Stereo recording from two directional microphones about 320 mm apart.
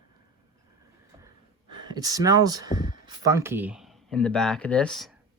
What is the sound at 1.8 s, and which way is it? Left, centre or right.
Speech, centre.